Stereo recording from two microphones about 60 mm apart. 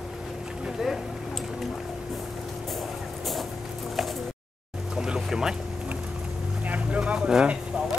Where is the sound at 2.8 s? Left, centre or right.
Centre.